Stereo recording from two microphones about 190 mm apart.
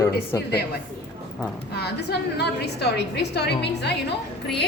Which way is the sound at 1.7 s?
60° left (ahead or behind).